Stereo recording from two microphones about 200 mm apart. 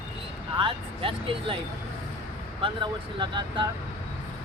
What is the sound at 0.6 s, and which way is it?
Speech, 25° right (ahead or behind).